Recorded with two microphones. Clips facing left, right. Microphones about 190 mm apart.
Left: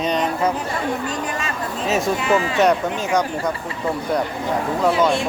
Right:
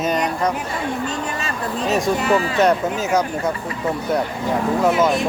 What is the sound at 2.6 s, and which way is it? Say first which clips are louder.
Speech: even; 5° right (ahead or behind).